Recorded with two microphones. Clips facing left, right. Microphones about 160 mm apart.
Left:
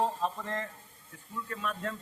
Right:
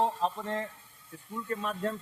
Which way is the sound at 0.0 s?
35° right (ahead or behind).